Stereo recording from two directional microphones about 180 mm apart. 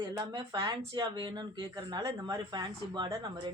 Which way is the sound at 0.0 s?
20° right (ahead or behind).